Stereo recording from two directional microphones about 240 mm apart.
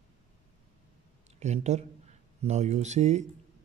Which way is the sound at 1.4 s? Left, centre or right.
Right.